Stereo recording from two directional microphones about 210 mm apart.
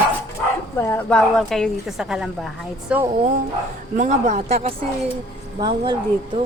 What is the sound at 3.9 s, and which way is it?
Speech, 35° right (ahead or behind).